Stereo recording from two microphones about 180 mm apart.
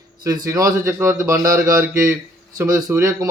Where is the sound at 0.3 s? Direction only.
20° right (ahead or behind).